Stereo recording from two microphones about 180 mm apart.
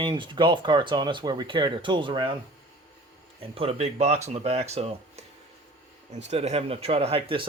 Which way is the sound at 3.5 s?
35° right (ahead or behind).